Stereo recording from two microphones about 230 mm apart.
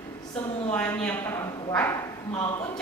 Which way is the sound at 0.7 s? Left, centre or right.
Centre.